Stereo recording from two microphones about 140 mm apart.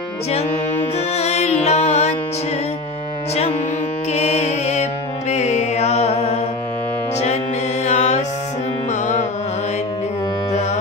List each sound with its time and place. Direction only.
0.9 s music: 50° left (ahead or behind)
4.1 s music: 50° left (ahead or behind)
7.8 s mantra: 55° left (ahead or behind)